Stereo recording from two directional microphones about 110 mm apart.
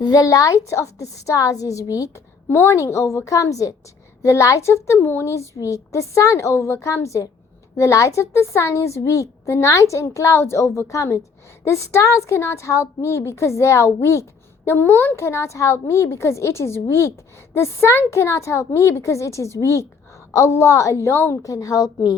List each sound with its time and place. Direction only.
0.0 s a woman's voice: 30° left (ahead or behind)